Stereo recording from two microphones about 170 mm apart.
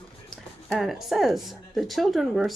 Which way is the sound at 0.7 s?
Centre (ahead or behind).